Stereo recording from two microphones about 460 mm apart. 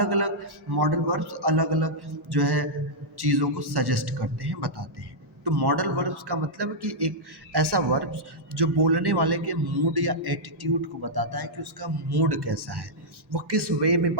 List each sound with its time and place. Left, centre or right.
0.0 s speech: right